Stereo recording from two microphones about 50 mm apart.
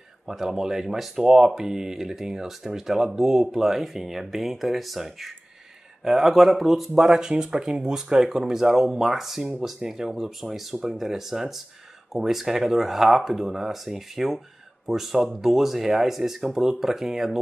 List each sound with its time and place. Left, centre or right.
0.3 s speech: centre